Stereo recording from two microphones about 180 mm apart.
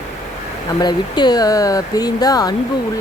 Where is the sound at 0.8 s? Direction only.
25° left (ahead or behind).